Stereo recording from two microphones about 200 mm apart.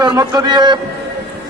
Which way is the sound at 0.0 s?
20° right (ahead or behind).